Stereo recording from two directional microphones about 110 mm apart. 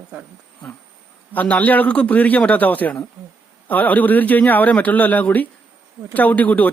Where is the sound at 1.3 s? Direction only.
15° left (ahead or behind).